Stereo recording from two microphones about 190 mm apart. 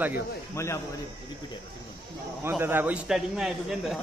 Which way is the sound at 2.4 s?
10° right (ahead or behind).